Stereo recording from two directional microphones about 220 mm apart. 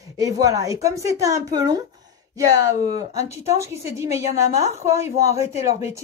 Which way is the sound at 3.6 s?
15° right (ahead or behind).